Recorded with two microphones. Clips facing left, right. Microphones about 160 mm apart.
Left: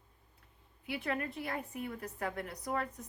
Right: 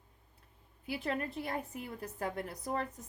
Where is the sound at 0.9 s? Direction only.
30° right (ahead or behind).